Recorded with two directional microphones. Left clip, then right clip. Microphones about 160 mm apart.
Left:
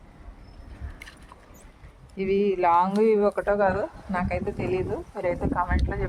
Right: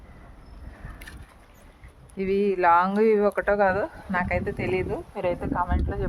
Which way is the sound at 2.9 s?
40° right (ahead or behind).